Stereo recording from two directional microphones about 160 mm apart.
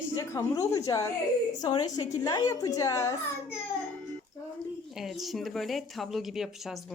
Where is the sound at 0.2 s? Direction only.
20° left (ahead or behind).